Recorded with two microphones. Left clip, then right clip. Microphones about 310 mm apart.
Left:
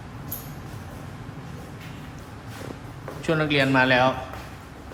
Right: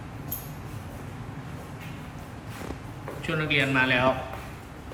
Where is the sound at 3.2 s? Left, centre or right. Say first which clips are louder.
Left 3 dB; centre.